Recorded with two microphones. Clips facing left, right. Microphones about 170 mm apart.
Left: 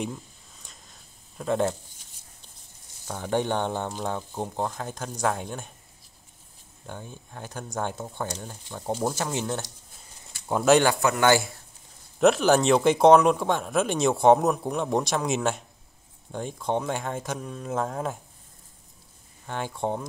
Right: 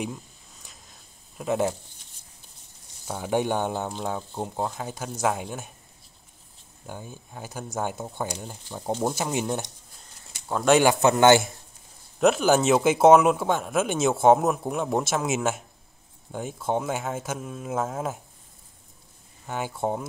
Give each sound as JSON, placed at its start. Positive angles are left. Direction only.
{"t": 0.0, "sound": "a sound", "side_deg": 0}
{"t": 1.4, "sound": "speech", "side_deg": -10}
{"t": 3.1, "sound": "speech", "side_deg": -10}
{"t": 6.9, "sound": "speech", "side_deg": -10}
{"t": 10.8, "sound": "speech", "side_deg": -20}
{"t": 12.2, "sound": "speech", "side_deg": 0}
{"t": 19.4, "sound": "speech", "side_deg": -5}